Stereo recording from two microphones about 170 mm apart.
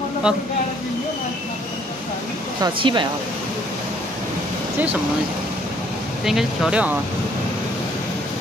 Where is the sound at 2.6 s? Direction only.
30° right (ahead or behind).